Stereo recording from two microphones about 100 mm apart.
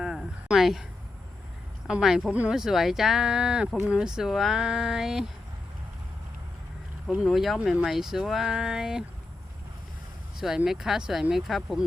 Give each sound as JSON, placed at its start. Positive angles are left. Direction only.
{"t": 0.0, "sound": "a sound", "side_deg": -5}
{"t": 1.9, "sound": "speech", "side_deg": -5}
{"t": 2.3, "sound": "speech", "side_deg": -15}
{"t": 2.6, "sound": "speech", "side_deg": -5}
{"t": 7.1, "sound": "speech", "side_deg": -5}
{"t": 10.4, "sound": "speech", "side_deg": -5}